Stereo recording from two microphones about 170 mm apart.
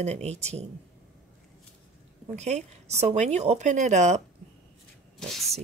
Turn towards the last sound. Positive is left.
turn(degrees=0)  # may be behind; listen again after turning